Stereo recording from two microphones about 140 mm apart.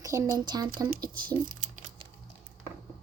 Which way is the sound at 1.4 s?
70° right (ahead or behind).